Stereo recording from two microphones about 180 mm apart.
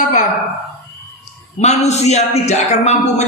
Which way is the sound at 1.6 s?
40° left (ahead or behind).